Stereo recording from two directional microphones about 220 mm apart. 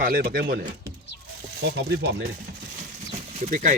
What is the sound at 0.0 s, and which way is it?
Speech, 40° right (ahead or behind).